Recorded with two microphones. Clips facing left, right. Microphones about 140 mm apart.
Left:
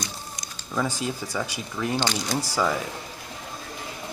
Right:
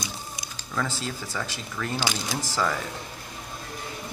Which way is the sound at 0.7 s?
15° left (ahead or behind).